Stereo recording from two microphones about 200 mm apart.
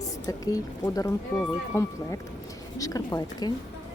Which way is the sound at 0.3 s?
15° left (ahead or behind).